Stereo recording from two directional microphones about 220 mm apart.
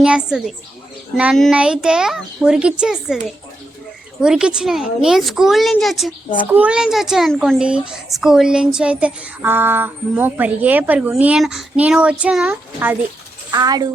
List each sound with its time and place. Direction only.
0.0 s speech: 5° right (ahead or behind)